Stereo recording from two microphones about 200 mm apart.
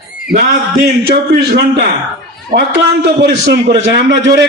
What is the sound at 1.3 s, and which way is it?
A man's voice, 55° right (ahead or behind).